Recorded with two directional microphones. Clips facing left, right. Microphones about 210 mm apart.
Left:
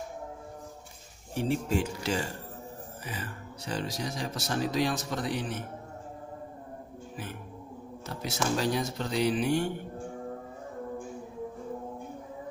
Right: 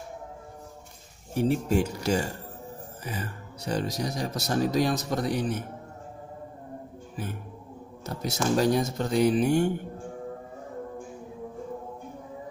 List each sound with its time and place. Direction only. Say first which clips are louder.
1.3 s speech: right 4 dB; 45° right (ahead or behind)
8.1 s speech: right 4 dB; 45° right (ahead or behind)